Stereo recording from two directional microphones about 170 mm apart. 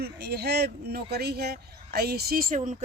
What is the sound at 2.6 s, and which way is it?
Speech, 40° right (ahead or behind).